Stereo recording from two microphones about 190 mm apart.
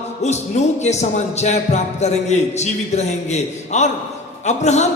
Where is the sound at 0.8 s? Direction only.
35° left (ahead or behind).